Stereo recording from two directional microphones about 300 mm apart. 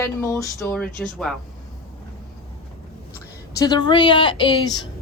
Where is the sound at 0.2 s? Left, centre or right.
Centre.